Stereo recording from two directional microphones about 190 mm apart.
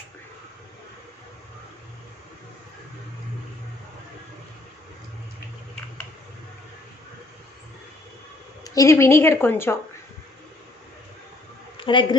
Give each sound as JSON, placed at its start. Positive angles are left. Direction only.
{"t": 8.6, "sound": "a woman's voice", "side_deg": 15}
{"t": 11.8, "sound": "a woman's voice", "side_deg": 25}